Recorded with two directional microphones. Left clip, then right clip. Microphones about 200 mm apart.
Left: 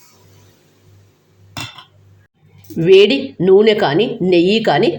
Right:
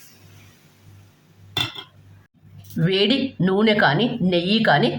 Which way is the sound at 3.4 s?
15° left (ahead or behind).